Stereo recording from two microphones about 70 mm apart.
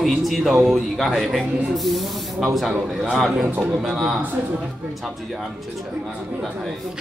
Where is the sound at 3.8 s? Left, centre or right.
Centre.